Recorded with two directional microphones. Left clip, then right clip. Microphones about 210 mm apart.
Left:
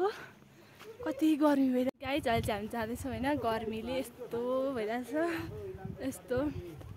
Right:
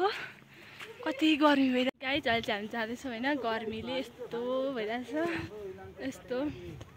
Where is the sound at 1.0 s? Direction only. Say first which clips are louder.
Right 3 dB; 10° left (ahead or behind).